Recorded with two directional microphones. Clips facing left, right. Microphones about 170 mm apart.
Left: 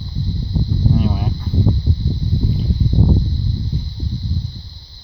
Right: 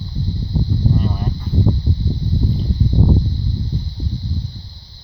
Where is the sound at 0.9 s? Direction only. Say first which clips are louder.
Left 2 dB; 10° left (ahead or behind).